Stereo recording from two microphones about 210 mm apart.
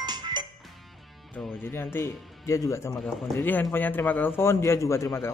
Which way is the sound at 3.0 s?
Centre (ahead or behind).